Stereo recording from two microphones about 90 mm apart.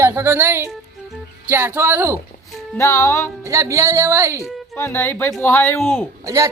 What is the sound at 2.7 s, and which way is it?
Speech, 30° left (ahead or behind).